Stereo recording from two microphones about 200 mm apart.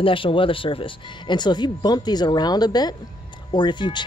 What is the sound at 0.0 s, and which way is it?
Speech, 25° left (ahead or behind).